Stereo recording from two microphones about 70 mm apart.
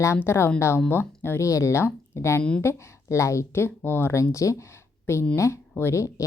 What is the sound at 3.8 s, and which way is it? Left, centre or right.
Speech, left.